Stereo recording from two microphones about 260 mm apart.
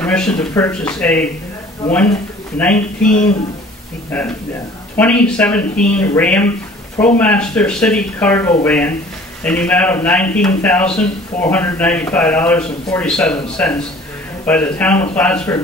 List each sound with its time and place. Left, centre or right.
0.0 s speech: centre
2.6 s speech: centre
3.1 s speech: left
4.9 s a man's voice: centre